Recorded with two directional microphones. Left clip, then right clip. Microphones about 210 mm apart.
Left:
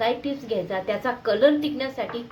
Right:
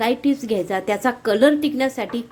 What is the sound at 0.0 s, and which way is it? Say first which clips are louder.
A woman's voice: right 4 dB; 50° right (ahead or behind).